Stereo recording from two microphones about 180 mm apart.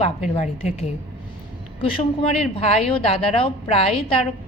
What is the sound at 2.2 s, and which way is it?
A woman's voice, 35° left (ahead or behind).